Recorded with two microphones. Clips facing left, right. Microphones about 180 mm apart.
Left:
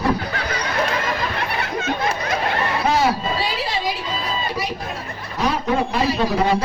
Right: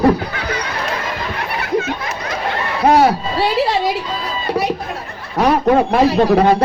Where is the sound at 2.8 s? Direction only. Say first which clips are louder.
Right 8 dB; 60° right (ahead or behind).